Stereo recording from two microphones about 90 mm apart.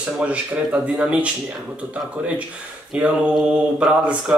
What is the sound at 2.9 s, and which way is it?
A man's voice, 15° right (ahead or behind).